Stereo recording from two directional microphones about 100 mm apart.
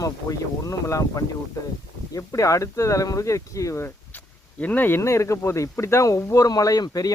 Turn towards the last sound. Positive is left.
turn(degrees=40)  # may be behind; listen again after turning